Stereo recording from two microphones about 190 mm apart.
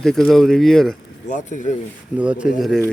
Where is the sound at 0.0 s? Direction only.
Centre (ahead or behind).